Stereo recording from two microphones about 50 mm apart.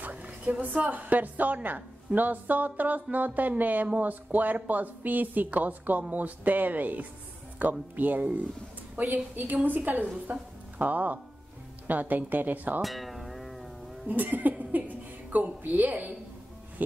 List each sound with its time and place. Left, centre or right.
0.0 s a woman's voice: right
12.8 s music: centre
14.0 s speech: right